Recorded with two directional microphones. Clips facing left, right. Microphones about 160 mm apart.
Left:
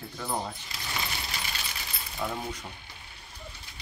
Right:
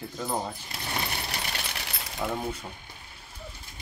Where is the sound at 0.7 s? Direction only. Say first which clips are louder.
Right 4 dB; 60° right (ahead or behind).